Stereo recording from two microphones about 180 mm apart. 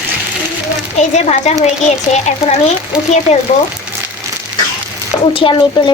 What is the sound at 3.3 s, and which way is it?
Speech, 35° left (ahead or behind).